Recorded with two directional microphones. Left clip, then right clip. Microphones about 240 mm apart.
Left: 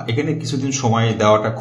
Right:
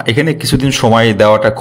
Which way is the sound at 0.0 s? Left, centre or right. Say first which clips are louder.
Right 9 dB; right.